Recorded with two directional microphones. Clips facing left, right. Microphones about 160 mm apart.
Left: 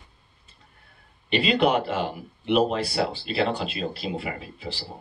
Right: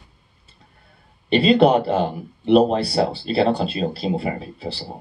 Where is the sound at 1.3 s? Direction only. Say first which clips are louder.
Right 7 dB; 35° right (ahead or behind).